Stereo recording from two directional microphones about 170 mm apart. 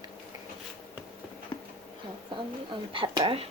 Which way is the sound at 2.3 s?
30° right (ahead or behind).